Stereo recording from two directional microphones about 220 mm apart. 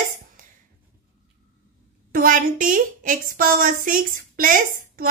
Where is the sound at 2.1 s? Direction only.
40° right (ahead or behind).